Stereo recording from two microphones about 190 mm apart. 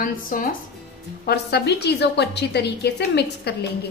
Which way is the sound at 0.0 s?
45° left (ahead or behind).